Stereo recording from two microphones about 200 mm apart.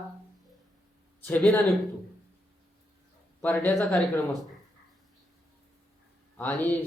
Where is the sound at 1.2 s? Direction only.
5° left (ahead or behind).